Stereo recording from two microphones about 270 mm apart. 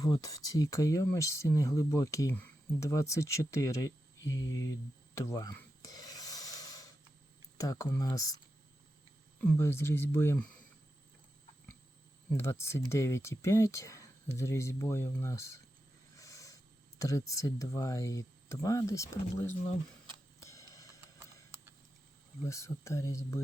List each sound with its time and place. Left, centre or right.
0.0 s speech: centre
4.3 s speech: left
4.6 s a sound: centre
7.6 s speech: centre
9.4 s speech: centre
12.3 s speech: centre
16.1 s a sound: centre
17.0 s speech: centre
20.4 s a sound: centre
22.4 s speech: centre